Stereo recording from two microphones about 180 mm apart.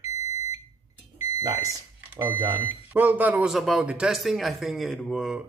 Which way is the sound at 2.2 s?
15° right (ahead or behind).